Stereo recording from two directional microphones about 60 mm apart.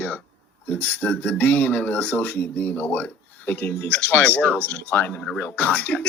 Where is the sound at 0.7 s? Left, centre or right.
Left.